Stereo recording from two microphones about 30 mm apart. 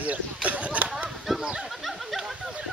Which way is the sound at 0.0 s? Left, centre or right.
Right.